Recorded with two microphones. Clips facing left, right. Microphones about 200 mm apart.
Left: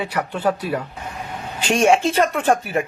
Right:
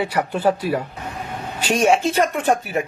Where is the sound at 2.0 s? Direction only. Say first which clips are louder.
Left 1 dB; 10° right (ahead or behind).